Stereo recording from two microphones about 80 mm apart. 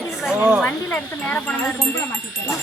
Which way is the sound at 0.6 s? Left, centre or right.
Centre.